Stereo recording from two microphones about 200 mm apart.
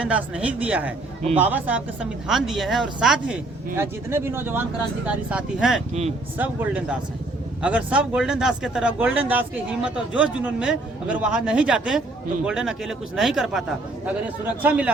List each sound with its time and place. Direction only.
0.0 s speech: 5° right (ahead or behind)
5.9 s speech: 35° right (ahead or behind)
6.3 s speech: 10° right (ahead or behind)